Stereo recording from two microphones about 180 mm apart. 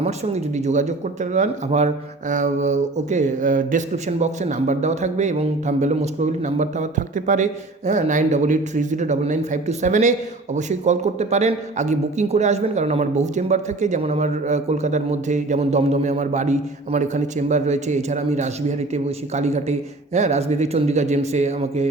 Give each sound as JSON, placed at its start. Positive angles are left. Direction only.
{"t": 0.0, "sound": "a man's voice", "side_deg": -40}